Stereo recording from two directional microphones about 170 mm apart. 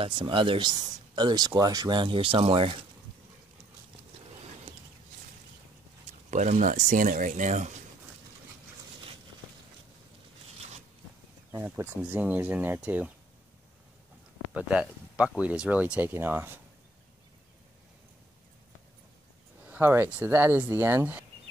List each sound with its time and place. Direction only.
0.0 s speech: 30° right (ahead or behind)
6.3 s speech: 45° right (ahead or behind)
11.5 s speech: 15° right (ahead or behind)
14.5 s speech: 5° right (ahead or behind)
19.7 s speech: 15° right (ahead or behind)